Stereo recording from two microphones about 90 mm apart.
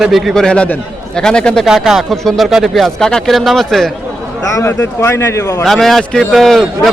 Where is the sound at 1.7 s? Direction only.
5° right (ahead or behind).